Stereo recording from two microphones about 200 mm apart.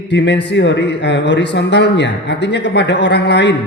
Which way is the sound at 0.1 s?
60° left (ahead or behind).